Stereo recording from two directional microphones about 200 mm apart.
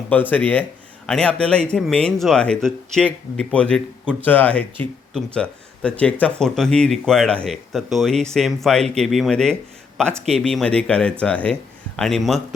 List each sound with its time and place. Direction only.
0.1 s speech: 10° left (ahead or behind)